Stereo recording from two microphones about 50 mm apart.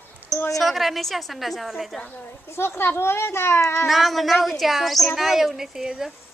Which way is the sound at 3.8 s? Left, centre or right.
Centre.